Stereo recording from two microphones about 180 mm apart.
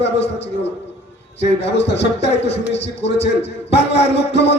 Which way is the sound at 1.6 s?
75° left (ahead or behind).